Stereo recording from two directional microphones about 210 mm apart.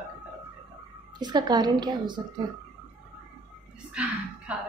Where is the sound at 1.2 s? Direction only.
20° right (ahead or behind).